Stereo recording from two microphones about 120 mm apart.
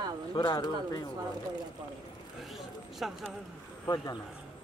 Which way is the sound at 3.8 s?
30° left (ahead or behind).